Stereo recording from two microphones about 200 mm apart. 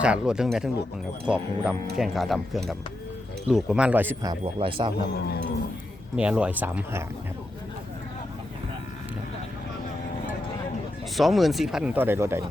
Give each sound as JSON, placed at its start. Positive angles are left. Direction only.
{"t": 0.0, "sound": "speech", "side_deg": -5}
{"t": 6.1, "sound": "speech", "side_deg": -5}
{"t": 11.2, "sound": "speech", "side_deg": 0}